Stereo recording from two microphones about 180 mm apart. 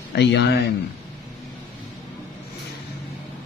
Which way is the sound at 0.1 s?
70° left (ahead or behind).